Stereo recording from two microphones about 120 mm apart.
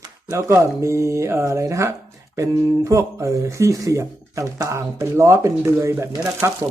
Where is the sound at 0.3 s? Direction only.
25° right (ahead or behind).